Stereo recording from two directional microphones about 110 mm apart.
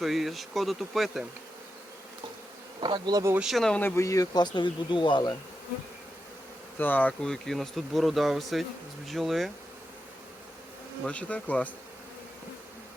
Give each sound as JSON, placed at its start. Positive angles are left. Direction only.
{"t": 0.0, "sound": "speech", "side_deg": 0}
{"t": 2.8, "sound": "bee", "side_deg": -40}
{"t": 3.4, "sound": "speech", "side_deg": 0}
{"t": 3.8, "sound": "speech", "side_deg": 20}
{"t": 4.4, "sound": "speech", "side_deg": 40}
{"t": 6.7, "sound": "speech", "side_deg": 15}
{"t": 11.0, "sound": "bee", "side_deg": 10}